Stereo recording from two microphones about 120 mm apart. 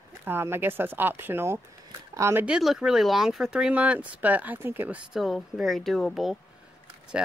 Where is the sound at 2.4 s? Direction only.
5° right (ahead or behind).